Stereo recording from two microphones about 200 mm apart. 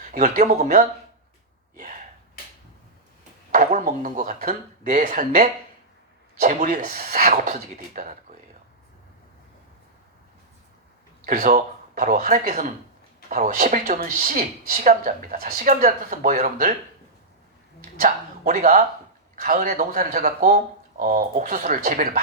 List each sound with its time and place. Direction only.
0.0 s speech: 40° right (ahead or behind)
3.5 s speech: 40° right (ahead or behind)
11.3 s speech: 40° right (ahead or behind)
18.0 s speech: 40° right (ahead or behind)